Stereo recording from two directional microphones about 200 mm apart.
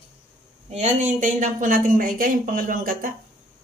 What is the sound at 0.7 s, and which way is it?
Speech, 35° right (ahead or behind).